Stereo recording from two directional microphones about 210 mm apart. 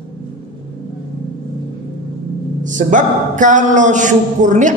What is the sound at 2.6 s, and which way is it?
A man's voice, 35° right (ahead or behind).